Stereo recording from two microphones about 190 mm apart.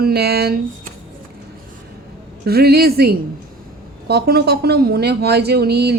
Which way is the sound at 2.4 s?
55° right (ahead or behind).